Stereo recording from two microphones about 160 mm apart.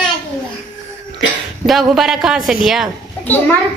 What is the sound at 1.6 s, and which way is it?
Speech, centre (ahead or behind).